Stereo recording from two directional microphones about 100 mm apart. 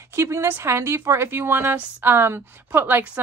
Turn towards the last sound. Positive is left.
turn(degrees=-20)  # may be behind; listen again after turning